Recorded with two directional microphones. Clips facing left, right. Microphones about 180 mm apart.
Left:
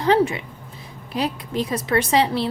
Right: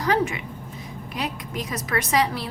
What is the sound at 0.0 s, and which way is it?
A woman's voice, 30° left (ahead or behind).